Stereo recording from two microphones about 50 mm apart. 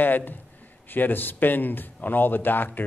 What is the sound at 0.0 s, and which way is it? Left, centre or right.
A man's voice, left.